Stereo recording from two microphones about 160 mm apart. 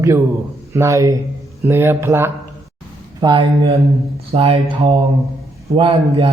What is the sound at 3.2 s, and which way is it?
Speech, 30° right (ahead or behind).